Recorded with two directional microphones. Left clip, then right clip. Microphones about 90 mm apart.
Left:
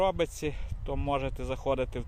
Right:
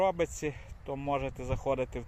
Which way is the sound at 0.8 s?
35° left (ahead or behind).